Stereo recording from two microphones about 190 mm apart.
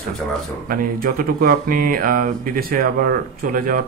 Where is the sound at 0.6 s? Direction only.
50° right (ahead or behind).